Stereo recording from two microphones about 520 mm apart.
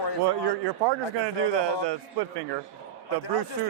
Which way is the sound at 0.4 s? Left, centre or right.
Right.